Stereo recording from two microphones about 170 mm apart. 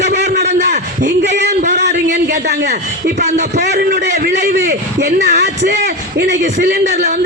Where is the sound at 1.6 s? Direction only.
45° right (ahead or behind).